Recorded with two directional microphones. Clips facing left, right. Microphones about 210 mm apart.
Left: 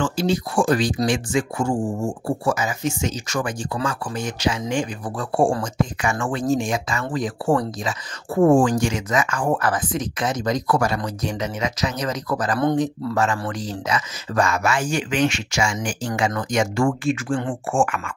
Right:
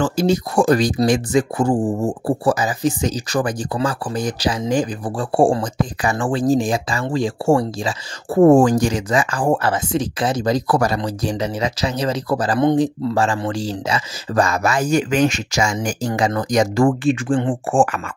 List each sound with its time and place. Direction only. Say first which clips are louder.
0.0 s speech: right 4 dB; 45° right (ahead or behind); by 7.9 s 25° right (ahead or behind)
8.4 s speech: right 4 dB; 40° right (ahead or behind)